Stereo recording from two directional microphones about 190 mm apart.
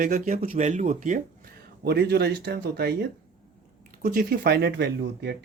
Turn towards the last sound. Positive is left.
turn(degrees=-65)  # may be behind; listen again after turning